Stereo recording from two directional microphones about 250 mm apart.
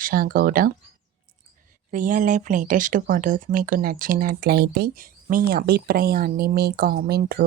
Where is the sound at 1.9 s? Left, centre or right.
Right.